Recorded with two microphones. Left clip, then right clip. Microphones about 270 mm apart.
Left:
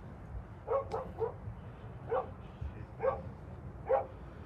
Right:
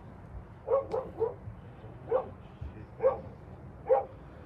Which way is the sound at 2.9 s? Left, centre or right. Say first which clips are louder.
Right 6 dB; right.